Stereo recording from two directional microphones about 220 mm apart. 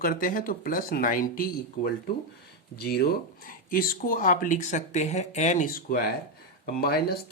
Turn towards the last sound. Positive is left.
turn(degrees=45)  # may be behind; listen again after turning